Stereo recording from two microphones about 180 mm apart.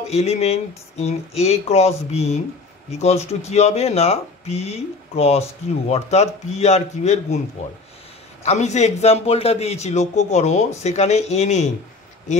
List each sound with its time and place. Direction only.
0.1 s a man's voice: 35° left (ahead or behind)
8.5 s a man's voice: 40° left (ahead or behind)